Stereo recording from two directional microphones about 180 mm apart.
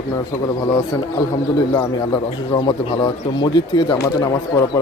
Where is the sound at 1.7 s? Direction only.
25° left (ahead or behind).